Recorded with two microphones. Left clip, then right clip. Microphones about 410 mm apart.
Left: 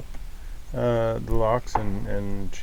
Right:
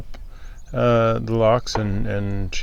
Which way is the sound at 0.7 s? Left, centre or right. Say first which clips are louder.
Right 6 dB; right.